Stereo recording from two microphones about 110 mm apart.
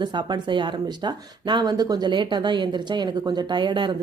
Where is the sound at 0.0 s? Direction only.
45° right (ahead or behind).